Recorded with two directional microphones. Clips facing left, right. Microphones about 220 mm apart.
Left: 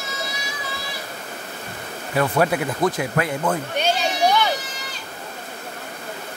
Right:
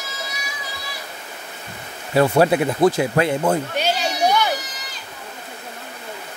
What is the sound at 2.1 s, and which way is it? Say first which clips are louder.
Speech: right 4 dB; 30° right (ahead or behind).